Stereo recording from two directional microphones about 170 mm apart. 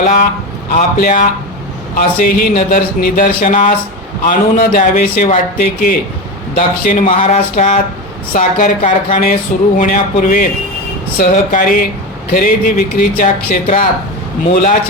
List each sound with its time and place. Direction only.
0.0 s speech: 50° left (ahead or behind)